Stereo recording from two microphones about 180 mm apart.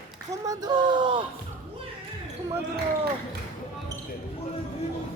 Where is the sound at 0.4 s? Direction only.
20° right (ahead or behind).